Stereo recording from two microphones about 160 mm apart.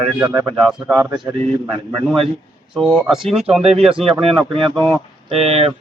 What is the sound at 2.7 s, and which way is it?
Speech, 5° left (ahead or behind).